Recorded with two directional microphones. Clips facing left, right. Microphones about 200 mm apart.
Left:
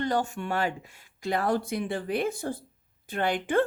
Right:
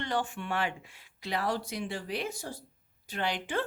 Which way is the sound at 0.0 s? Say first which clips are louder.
Left 5 dB; 40° left (ahead or behind).